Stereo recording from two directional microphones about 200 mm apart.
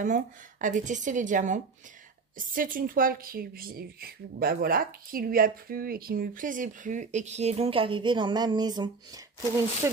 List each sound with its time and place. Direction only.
0.0 s speech: 40° right (ahead or behind); by 9.2 s 20° right (ahead or behind)